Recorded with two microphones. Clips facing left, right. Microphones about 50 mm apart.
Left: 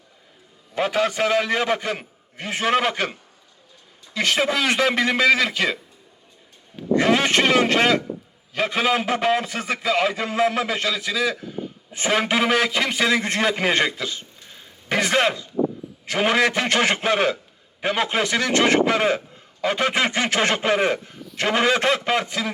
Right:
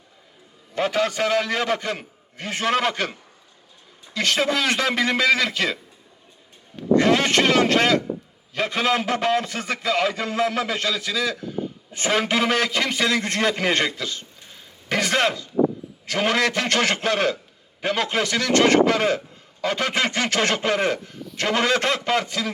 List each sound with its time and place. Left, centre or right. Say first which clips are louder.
0.7 s a man's voice: left 1 dB; centre
4.1 s a man's voice: left 1 dB; centre
6.9 s a man's voice: right 1 dB; centre